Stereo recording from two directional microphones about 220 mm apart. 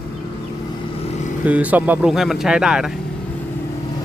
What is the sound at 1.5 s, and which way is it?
Speech, 5° right (ahead or behind).